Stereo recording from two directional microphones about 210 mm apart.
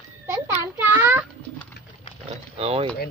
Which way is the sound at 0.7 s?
10° right (ahead or behind).